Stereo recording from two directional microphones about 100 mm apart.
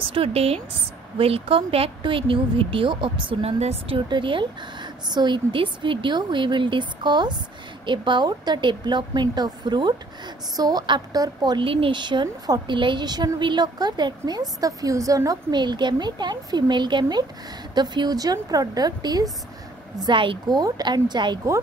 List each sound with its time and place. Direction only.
0.1 s speech: 80° right
1.1 s speech: 70° right (ahead or behind)
3.4 s speech: 90° right
4.1 s a woman's voice: 55° right (ahead or behind)
11.6 s a woman's voice: 65° right (ahead or behind); by 15.3 s 35° right (ahead or behind)
15.5 s a woman's voice: 45° right (ahead or behind)
20.0 s a woman's voice: 55° right (ahead or behind)